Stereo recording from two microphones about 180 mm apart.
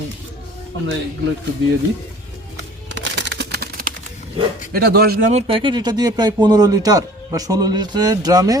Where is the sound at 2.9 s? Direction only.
80° right; by 3.9 s 55° right (ahead or behind).